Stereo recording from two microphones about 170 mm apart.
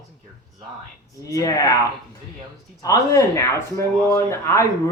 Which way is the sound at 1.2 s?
20° left (ahead or behind).